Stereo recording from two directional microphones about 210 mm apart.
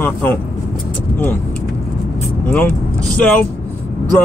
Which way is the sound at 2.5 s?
5° left (ahead or behind).